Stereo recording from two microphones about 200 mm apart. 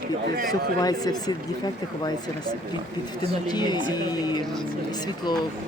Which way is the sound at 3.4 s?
20° left (ahead or behind).